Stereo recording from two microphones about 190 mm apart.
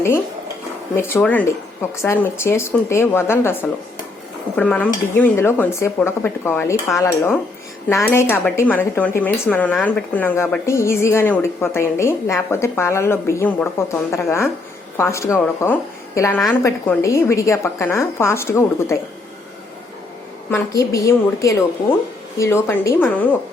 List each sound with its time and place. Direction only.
0.9 s speech: 10° left (ahead or behind)
20.5 s speech: 15° left (ahead or behind)